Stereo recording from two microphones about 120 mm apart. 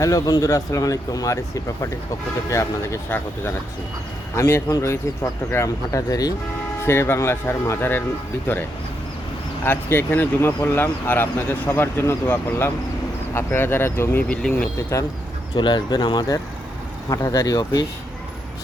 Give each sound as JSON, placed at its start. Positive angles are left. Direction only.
{"t": 0.0, "sound": "speech", "side_deg": 30}
{"t": 9.6, "sound": "speech", "side_deg": 15}
{"t": 14.9, "sound": "speech", "side_deg": 25}
{"t": 15.5, "sound": "speech", "side_deg": 40}